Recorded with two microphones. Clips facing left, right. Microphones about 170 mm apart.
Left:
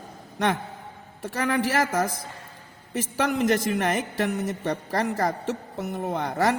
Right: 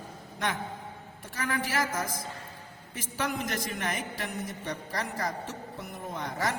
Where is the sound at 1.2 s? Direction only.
70° left (ahead or behind).